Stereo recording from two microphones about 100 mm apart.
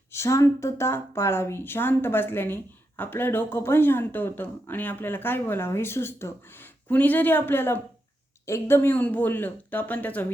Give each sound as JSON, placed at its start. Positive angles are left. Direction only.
{"t": 0.1, "sound": "speech", "side_deg": 30}